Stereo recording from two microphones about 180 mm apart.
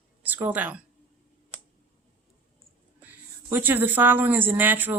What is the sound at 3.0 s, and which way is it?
Speech, 10° right (ahead or behind).